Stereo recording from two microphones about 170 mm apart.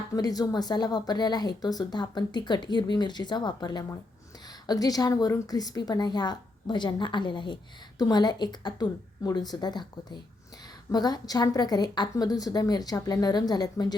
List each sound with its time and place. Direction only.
0.1 s a woman's voice: 20° left (ahead or behind)